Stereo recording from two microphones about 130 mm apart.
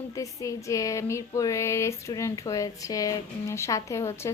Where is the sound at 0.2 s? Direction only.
25° left (ahead or behind).